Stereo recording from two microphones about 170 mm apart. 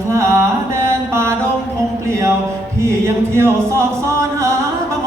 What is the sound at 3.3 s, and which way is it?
Chant, 15° right (ahead or behind).